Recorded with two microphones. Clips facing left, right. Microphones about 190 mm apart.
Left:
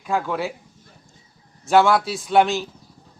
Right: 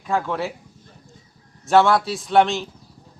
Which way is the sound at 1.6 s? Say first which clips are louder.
Even; centre (ahead or behind).